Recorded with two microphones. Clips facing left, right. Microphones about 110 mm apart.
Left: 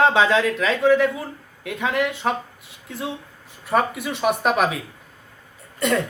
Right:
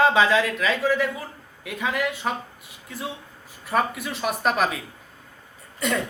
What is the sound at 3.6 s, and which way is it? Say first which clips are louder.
A man's voice: left 3 dB; centre (ahead or behind).